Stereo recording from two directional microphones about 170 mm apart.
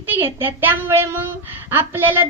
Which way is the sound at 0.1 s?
15° right (ahead or behind).